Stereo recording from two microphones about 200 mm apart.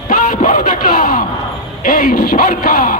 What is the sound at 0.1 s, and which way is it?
Yell, 40° left (ahead or behind).